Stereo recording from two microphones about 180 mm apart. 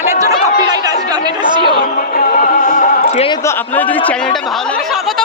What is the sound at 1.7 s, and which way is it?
Speech, 50° left (ahead or behind).